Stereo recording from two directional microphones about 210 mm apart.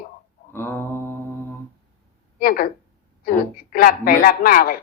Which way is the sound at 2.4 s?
40° left (ahead or behind).